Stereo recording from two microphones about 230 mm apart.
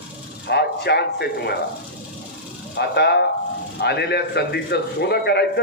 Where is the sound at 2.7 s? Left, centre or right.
Left.